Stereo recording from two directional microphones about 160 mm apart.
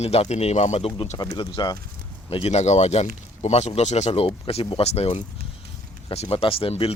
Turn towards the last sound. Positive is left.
turn(degrees=35)  # may be behind; listen again after turning